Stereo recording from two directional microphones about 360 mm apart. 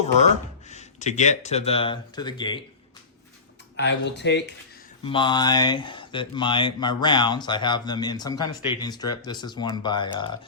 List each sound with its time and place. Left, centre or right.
0.7 s speech: centre
3.8 s speech: left
5.0 s speech: centre